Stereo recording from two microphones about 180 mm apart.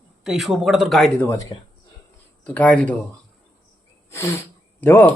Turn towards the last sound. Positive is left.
turn(degrees=10)  # may be behind; listen again after turning